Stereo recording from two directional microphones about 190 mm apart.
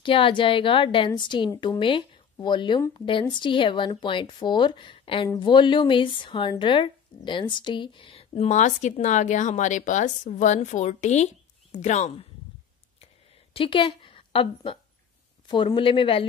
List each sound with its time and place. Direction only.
0.0 s a woman's voice: 25° left (ahead or behind)
13.0 s a sound: 30° left (ahead or behind)
15.4 s a woman's voice: 25° left (ahead or behind)